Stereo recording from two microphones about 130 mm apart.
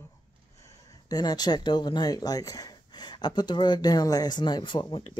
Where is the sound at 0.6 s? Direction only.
25° left (ahead or behind).